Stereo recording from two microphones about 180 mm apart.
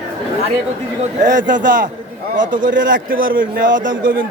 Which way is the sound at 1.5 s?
45° right (ahead or behind).